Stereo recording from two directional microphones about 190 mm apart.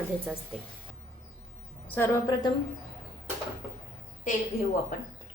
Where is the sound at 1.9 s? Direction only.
15° left (ahead or behind).